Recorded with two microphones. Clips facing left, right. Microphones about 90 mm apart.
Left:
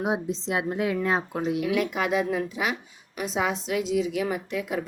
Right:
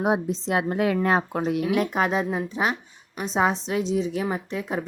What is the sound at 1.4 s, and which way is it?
A woman's voice, 45° right (ahead or behind).